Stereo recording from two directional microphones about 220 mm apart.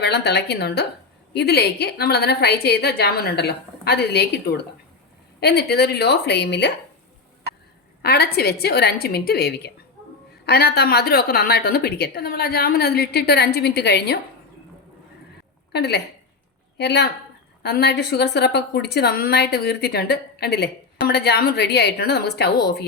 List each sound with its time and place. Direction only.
0.0 s a woman's voice: 50° left (ahead or behind)
8.0 s a woman's voice: 45° left (ahead or behind)
15.7 s a woman's voice: 50° left (ahead or behind)